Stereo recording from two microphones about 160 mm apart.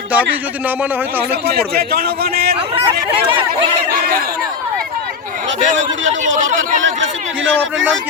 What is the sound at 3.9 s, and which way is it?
Speech, 70° right (ahead or behind).